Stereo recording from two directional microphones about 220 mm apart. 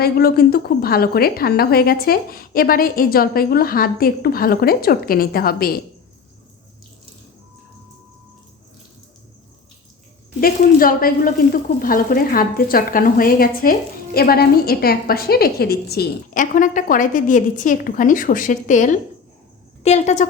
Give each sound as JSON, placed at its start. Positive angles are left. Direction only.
{"t": 0.0, "sound": "a woman's voice", "side_deg": 45}
{"t": 10.4, "sound": "sizzle", "side_deg": 40}